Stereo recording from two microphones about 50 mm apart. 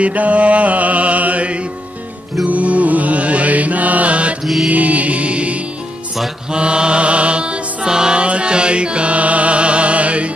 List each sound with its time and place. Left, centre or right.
0.0 s mantra: right
4.6 s music: right